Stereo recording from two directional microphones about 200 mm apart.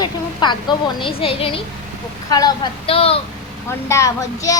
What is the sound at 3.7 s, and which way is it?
Speech, 15° left (ahead or behind).